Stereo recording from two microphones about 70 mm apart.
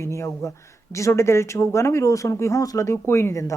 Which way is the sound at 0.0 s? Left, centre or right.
Left.